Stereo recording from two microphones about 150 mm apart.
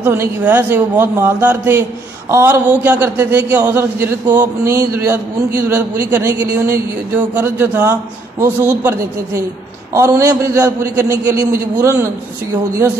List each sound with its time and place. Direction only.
0.0 s a man's voice: 15° right (ahead or behind)